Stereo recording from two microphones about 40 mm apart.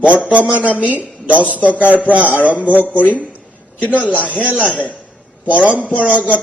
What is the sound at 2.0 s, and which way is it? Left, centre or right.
Speech, right.